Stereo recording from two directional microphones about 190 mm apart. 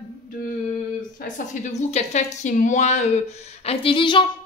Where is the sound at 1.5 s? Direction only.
40° left (ahead or behind).